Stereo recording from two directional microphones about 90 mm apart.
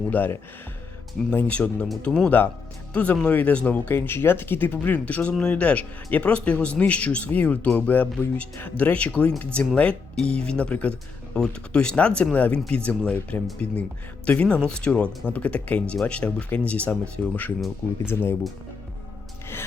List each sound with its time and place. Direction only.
0.1 s a man's voice: 20° left (ahead or behind)